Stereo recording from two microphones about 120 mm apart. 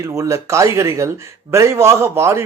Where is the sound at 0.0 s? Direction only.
25° right (ahead or behind).